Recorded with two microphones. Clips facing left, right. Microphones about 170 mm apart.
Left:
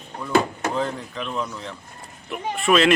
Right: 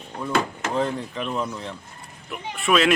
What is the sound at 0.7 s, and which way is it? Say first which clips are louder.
Speech: right 5 dB; 5° right (ahead or behind).